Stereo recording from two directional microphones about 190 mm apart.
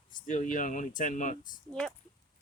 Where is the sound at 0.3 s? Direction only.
40° left (ahead or behind).